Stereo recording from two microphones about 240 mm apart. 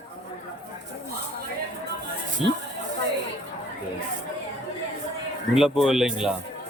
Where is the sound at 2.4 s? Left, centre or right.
Left.